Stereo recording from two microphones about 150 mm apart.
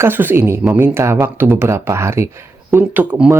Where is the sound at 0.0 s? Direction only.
15° right (ahead or behind).